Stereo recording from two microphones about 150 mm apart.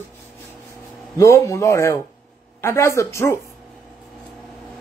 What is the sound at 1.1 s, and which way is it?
A woman's voice, 20° left (ahead or behind).